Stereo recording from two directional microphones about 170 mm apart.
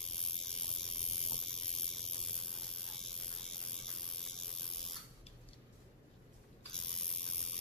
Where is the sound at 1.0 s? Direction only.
Centre (ahead or behind).